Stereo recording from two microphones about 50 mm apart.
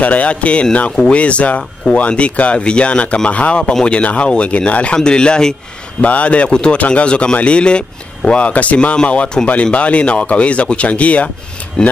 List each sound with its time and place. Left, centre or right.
0.0 s speech: left
5.9 s speech: left